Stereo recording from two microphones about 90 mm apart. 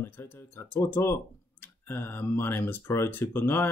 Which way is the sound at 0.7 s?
25° left (ahead or behind).